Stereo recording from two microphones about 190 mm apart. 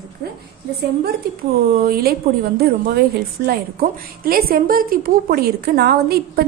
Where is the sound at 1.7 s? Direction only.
50° right (ahead or behind).